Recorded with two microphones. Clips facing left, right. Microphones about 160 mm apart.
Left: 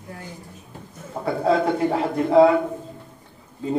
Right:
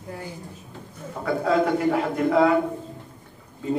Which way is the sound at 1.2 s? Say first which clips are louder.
Left 1 dB; 30° left (ahead or behind).